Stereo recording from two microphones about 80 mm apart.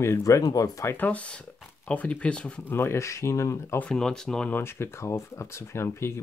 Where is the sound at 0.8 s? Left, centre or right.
Left.